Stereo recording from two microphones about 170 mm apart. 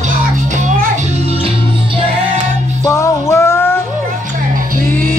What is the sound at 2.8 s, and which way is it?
Music, 20° left (ahead or behind).